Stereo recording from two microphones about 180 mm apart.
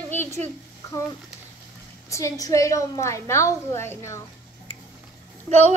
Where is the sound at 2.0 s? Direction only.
15° left (ahead or behind).